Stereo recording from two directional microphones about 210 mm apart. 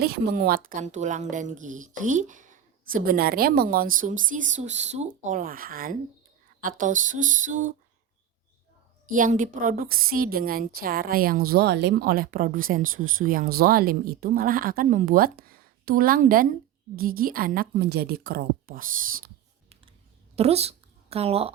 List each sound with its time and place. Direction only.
0.0 s a woman's voice: 45° right (ahead or behind)
9.0 s a woman's voice: 40° right (ahead or behind)
20.3 s a woman's voice: 30° right (ahead or behind)